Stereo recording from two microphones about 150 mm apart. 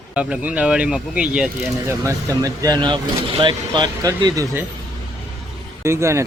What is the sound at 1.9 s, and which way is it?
Speech, 20° right (ahead or behind).